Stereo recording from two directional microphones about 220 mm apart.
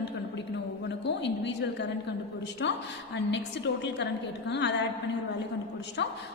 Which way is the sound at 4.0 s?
50° left (ahead or behind).